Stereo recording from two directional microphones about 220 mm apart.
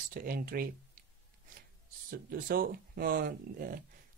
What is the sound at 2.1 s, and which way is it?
Speech, 40° right (ahead or behind).